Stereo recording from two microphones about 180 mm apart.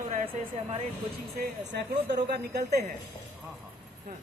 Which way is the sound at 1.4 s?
70° right (ahead or behind).